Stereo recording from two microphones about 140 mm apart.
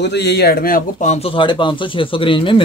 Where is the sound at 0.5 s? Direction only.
90° left.